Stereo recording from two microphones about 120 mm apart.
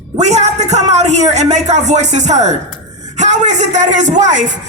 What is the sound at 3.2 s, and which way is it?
Speech, 85° right.